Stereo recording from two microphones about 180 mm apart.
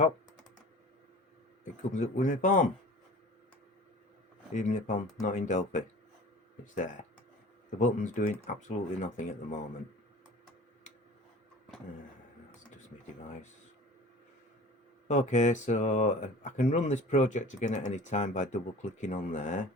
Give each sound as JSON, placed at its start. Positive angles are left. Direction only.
{"t": 1.9, "sound": "speech", "side_deg": 45}
{"t": 4.5, "sound": "speech", "side_deg": 45}
{"t": 7.8, "sound": "speech", "side_deg": 45}
{"t": 15.0, "sound": "speech", "side_deg": 40}